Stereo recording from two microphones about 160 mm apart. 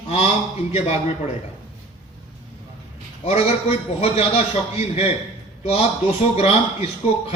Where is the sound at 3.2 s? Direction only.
40° left (ahead or behind).